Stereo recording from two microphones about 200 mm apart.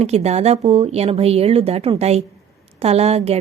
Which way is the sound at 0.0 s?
30° right (ahead or behind).